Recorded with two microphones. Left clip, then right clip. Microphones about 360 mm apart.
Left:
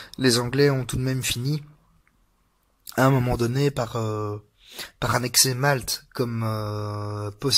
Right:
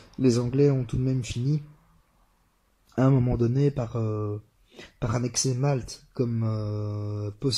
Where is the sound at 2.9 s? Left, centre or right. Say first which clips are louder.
Left 4 dB; left.